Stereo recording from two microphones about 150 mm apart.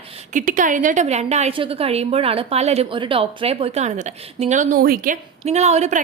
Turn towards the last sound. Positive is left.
turn(degrees=-50)  # may be behind; listen again after turning